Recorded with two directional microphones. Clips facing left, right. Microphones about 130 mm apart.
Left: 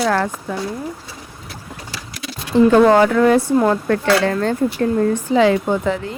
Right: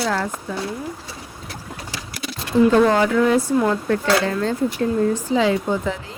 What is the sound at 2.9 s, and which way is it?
Speech, 55° left (ahead or behind).